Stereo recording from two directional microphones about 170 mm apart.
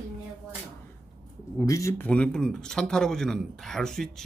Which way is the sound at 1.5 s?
20° left (ahead or behind).